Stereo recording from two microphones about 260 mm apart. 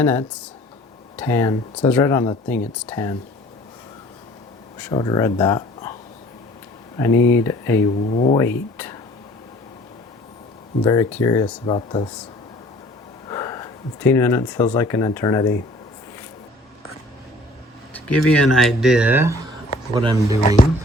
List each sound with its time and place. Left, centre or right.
0.0 s speech: centre
4.8 s speech: centre
6.9 s speech: centre
8.1 s speech: left
8.4 s speech: centre
11.1 s speech: centre
13.2 s speech: centre
17.9 s speech: centre